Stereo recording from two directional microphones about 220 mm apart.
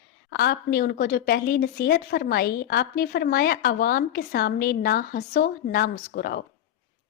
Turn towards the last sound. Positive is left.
turn(degrees=45)  # may be behind; listen again after turning